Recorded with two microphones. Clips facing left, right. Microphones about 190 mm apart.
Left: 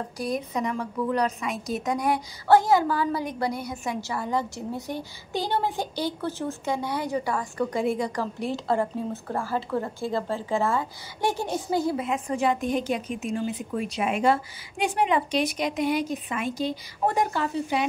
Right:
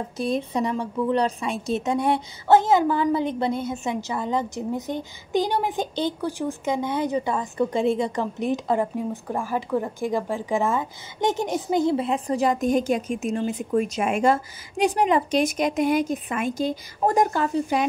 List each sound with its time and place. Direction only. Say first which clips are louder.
0.2 s a woman's voice: right 4 dB; 25° right (ahead or behind); by 17.8 s 45° right (ahead or behind)